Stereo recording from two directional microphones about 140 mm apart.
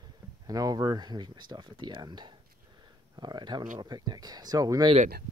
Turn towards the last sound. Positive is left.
turn(degrees=-30)  # may be behind; listen again after turning